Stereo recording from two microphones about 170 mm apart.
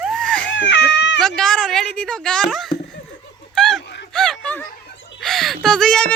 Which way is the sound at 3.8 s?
90° left.